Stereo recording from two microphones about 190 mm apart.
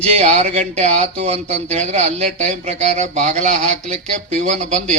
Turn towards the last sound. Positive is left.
turn(degrees=-35)  # may be behind; listen again after turning